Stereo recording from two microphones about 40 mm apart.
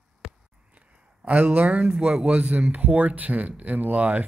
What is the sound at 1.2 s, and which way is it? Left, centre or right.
Speech, right.